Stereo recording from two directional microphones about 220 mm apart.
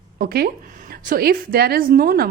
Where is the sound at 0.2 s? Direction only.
45° right (ahead or behind).